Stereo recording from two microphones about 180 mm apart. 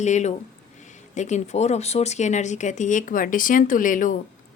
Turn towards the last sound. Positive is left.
turn(degrees=45)  # may be behind; listen again after turning